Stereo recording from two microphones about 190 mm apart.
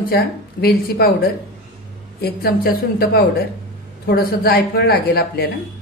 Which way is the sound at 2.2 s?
50° left (ahead or behind).